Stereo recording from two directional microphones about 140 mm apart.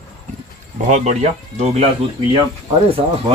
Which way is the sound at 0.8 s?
55° right (ahead or behind).